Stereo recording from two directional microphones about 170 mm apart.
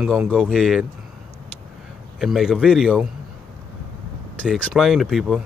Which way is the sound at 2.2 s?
Centre (ahead or behind).